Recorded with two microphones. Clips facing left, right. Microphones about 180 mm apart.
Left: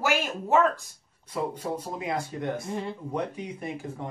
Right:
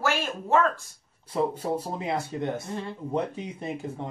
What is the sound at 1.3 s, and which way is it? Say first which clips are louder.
Speech: right 4 dB; 30° right (ahead or behind).